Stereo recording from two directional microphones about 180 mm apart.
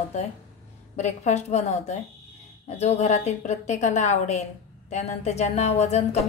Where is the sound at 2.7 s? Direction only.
40° left (ahead or behind).